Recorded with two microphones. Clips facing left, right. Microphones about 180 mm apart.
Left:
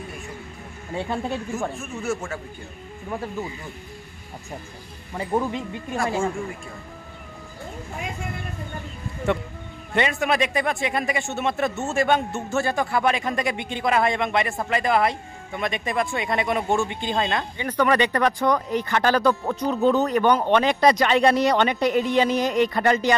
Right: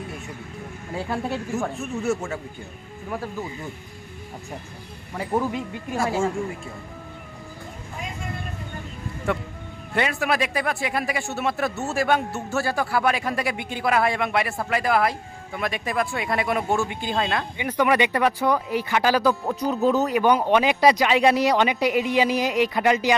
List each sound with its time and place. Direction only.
0.9 s speech: 5° right (ahead or behind)
1.8 s speech: 20° right (ahead or behind)
5.1 s speech: 5° right (ahead or behind)
9.9 s speech: 5° right (ahead or behind)